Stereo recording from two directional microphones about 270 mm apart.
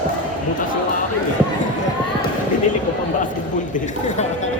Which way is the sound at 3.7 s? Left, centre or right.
Left.